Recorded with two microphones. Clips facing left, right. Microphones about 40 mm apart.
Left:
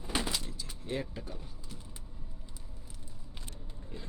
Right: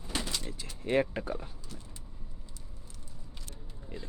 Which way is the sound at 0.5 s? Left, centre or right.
Right.